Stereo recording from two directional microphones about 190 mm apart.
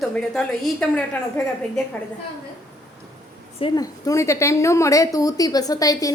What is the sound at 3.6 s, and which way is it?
A woman's voice, 20° left (ahead or behind).